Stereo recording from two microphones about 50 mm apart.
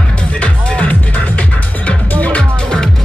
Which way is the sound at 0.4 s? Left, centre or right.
Left.